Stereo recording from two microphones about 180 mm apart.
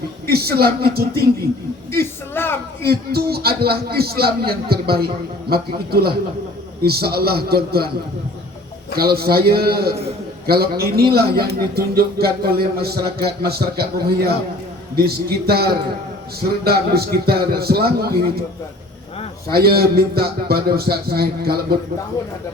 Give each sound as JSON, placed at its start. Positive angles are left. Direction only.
{"t": 0.3, "sound": "speech", "side_deg": -60}
{"t": 2.3, "sound": "a sound", "side_deg": 10}
{"t": 2.8, "sound": "speech", "side_deg": -60}
{"t": 9.0, "sound": "speech", "side_deg": -60}
{"t": 14.9, "sound": "speech", "side_deg": -60}
{"t": 19.5, "sound": "speech", "side_deg": -60}